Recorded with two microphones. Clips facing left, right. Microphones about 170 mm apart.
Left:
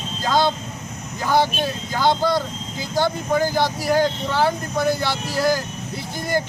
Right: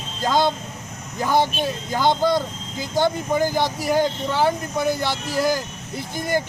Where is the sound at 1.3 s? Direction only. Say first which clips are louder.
Left 1 dB; 20° right (ahead or behind).